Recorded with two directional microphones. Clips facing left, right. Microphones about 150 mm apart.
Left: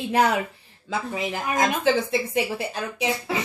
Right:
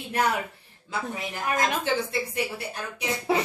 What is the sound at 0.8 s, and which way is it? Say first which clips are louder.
Speech: left 4 dB; 90° left.